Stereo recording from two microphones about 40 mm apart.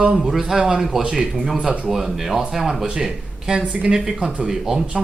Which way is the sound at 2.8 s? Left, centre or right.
Right.